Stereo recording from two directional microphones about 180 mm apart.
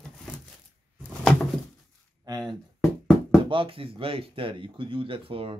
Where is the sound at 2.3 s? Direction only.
20° right (ahead or behind).